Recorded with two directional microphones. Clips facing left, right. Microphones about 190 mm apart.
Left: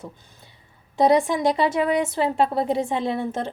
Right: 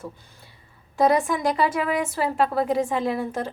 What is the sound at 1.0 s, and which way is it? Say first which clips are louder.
A woman's voice: left 2 dB; 25° left (ahead or behind).